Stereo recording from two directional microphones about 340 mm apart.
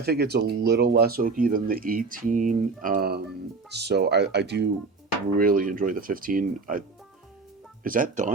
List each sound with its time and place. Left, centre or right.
0.0 s speech: right
7.9 s speech: right